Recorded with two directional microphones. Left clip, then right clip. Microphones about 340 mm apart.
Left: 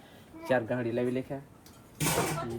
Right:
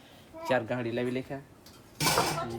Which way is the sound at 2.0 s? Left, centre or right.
Right.